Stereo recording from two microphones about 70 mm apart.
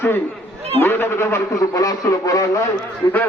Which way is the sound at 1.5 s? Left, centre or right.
Left.